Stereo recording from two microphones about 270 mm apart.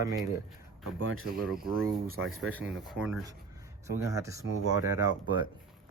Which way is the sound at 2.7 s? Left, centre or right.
Centre.